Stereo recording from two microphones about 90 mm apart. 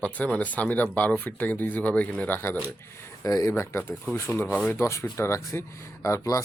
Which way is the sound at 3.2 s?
40° left (ahead or behind).